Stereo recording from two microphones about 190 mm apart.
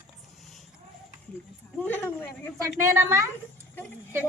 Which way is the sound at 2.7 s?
15° right (ahead or behind).